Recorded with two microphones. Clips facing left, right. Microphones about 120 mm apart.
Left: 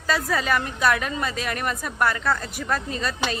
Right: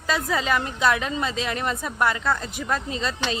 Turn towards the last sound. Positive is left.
turn(degrees=-20)  # may be behind; listen again after turning